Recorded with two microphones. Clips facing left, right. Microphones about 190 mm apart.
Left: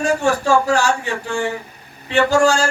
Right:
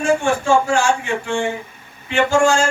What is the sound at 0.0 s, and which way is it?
A man's voice, 40° left (ahead or behind).